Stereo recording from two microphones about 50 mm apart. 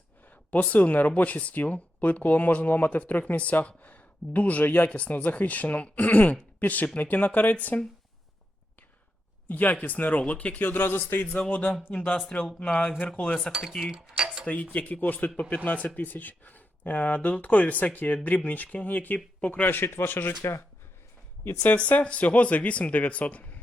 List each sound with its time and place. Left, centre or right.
0.3 s speech: left
9.5 s speech: left
11.3 s speech: left
13.5 s cutlery: centre
13.9 s a sound: centre
14.4 s speech: left
19.6 s a man's voice: left
21.6 s speech: left